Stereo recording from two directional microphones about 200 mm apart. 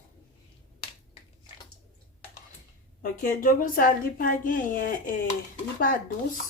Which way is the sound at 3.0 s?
45° left (ahead or behind).